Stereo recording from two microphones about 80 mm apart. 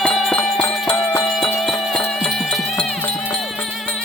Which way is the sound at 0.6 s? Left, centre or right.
Centre.